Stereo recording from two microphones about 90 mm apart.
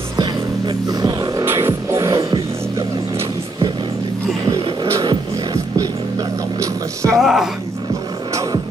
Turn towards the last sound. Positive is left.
turn(degrees=-5)  # may be behind; listen again after turning